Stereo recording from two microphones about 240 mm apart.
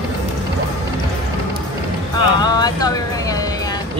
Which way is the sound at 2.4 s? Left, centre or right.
Centre.